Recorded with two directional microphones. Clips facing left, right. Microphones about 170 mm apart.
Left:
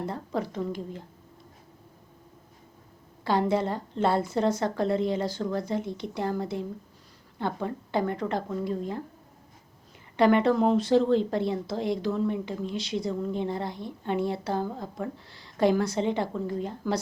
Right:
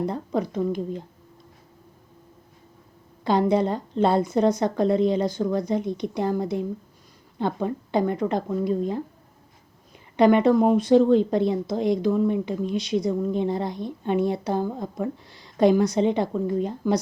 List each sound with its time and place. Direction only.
0.0 s speech: 20° right (ahead or behind)
3.2 s a woman's voice: 20° right (ahead or behind)
10.2 s a woman's voice: 15° right (ahead or behind)